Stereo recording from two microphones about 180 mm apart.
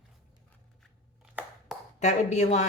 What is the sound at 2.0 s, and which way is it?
Speech, 40° left (ahead or behind).